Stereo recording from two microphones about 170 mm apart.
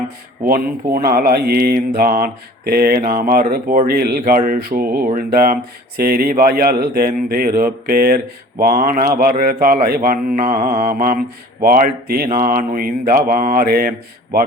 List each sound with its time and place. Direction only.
0.4 s a man's voice: 60° right (ahead or behind)